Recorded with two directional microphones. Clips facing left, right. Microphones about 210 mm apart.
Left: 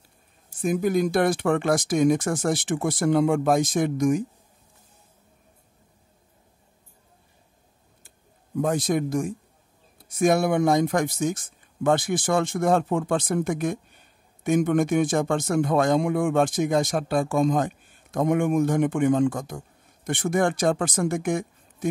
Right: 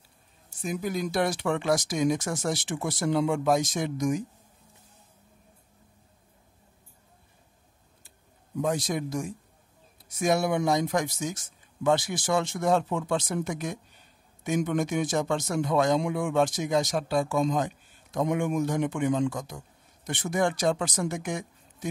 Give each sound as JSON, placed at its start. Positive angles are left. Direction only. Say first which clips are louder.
{"t": 0.6, "sound": "a man's voice", "louder": "left 8 dB", "side_deg": 50}
{"t": 8.5, "sound": "a man's voice", "louder": "left 5 dB", "side_deg": 50}